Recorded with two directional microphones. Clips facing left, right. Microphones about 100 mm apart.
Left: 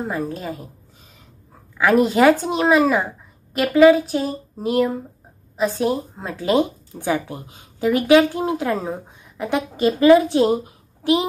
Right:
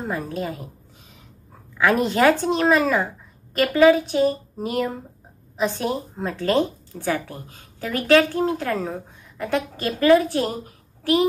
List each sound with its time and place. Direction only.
0.1 s speech: centre (ahead or behind)
1.8 s speech: 5° left (ahead or behind)